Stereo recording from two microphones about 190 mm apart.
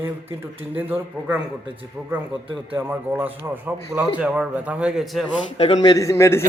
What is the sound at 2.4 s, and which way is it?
Speech, 30° right (ahead or behind).